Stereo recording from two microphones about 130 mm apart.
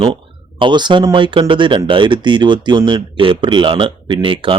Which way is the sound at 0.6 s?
35° right (ahead or behind).